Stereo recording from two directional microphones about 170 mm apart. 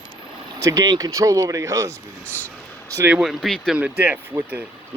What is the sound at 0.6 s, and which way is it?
Speech, 20° right (ahead or behind).